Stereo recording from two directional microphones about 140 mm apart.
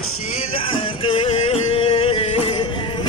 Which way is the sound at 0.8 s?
40° left (ahead or behind).